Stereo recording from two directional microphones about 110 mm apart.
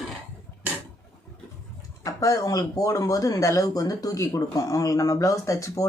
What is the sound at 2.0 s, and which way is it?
Speech, 30° left (ahead or behind).